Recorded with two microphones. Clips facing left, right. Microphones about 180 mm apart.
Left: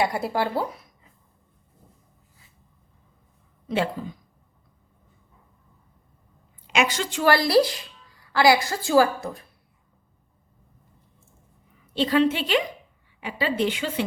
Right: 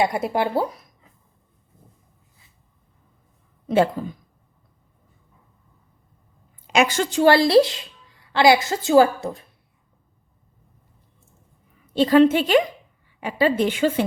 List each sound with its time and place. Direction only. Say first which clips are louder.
0.0 s speech: right 3 dB; 20° right (ahead or behind)
6.7 s a woman's voice: right 4 dB; 45° right (ahead or behind)
7.2 s a woman's voice: right 4 dB; 25° right (ahead or behind)
11.9 s a woman's voice: right 6 dB; 45° right (ahead or behind)